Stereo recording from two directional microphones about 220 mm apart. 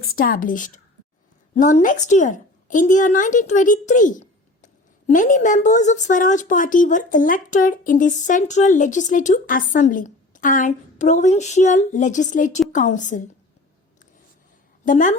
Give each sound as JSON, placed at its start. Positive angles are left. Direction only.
{"t": 0.2, "sound": "a woman's voice", "side_deg": 40}
{"t": 14.8, "sound": "a woman's voice", "side_deg": 35}